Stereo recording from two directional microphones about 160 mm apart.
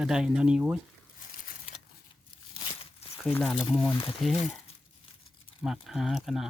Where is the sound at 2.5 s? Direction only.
35° left (ahead or behind).